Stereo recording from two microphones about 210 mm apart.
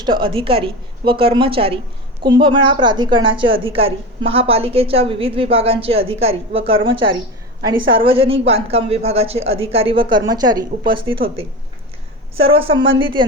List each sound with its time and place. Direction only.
0.0 s a woman's voice: 25° right (ahead or behind)
12.4 s a woman's voice: 25° right (ahead or behind)